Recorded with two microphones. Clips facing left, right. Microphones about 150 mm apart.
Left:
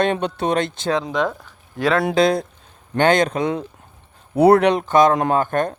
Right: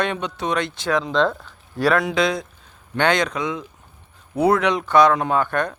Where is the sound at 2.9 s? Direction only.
50° left (ahead or behind).